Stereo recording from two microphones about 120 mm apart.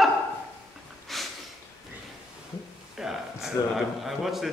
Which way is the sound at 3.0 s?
5° right (ahead or behind).